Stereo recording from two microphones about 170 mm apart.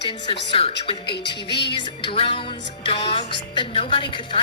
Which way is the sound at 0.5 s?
35° left (ahead or behind).